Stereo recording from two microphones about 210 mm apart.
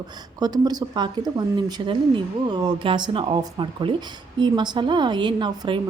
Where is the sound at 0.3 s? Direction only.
20° right (ahead or behind).